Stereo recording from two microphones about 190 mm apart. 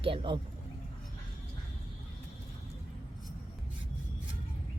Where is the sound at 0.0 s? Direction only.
25° right (ahead or behind).